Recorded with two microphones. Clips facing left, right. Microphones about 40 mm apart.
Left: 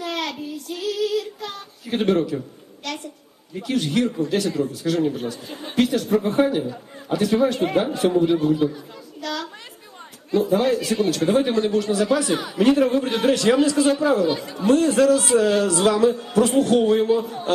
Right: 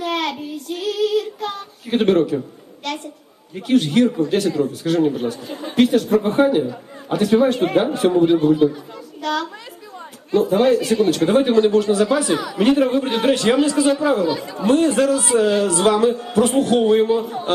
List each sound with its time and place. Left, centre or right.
0.0 s child singing: right
1.9 s speech: right
2.8 s a sound: right
3.7 s a man's voice: right
7.4 s a man's voice: right
9.2 s a woman's voice: right
12.5 s a man's voice: right
13.2 s speech: right
16.8 s a man's voice: right